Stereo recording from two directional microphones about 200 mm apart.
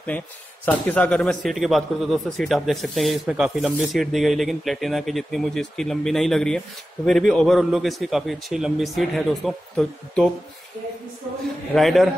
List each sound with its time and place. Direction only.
0.7 s a man's voice: 10° left (ahead or behind)
11.7 s a man's voice: centre (ahead or behind)